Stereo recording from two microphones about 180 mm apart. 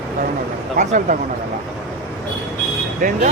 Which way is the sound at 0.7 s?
45° right (ahead or behind).